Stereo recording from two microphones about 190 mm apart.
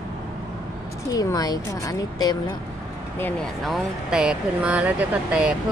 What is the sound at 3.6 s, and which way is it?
Speech, centre (ahead or behind).